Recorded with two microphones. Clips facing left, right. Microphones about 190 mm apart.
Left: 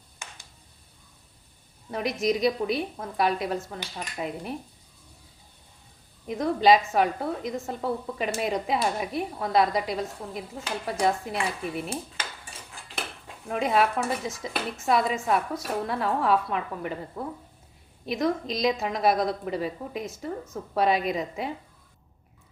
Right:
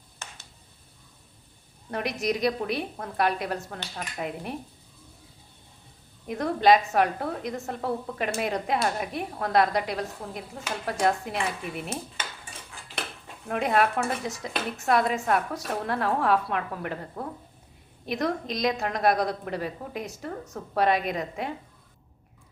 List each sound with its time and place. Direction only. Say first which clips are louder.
1.9 s a woman's voice: left 2 dB; centre (ahead or behind)
6.2 s a woman's voice: even; centre (ahead or behind)
13.5 s a woman's voice: even; centre (ahead or behind)